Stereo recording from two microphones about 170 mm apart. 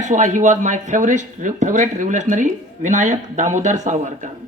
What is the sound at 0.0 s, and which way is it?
Speech, 45° right (ahead or behind).